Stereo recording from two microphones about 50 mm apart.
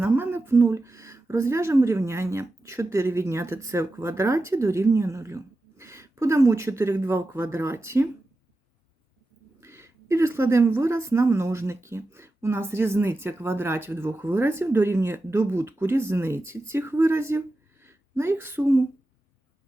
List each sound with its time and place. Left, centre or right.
0.0 s a sound: right
0.5 s a woman's voice: right
9.6 s a woman's voice: right